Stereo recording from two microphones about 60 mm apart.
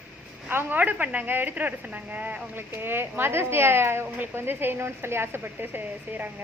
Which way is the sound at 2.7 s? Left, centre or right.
Right.